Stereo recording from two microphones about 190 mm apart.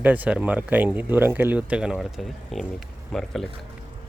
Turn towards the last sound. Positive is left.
turn(degrees=0)  # may be behind; listen again after turning